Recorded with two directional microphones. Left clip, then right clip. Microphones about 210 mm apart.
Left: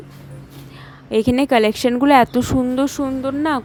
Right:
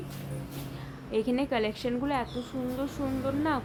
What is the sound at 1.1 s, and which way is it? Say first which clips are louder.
A woman's voice: left 13 dB; 45° left (ahead or behind).